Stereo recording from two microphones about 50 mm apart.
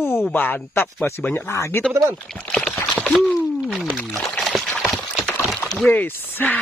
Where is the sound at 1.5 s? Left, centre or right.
Left.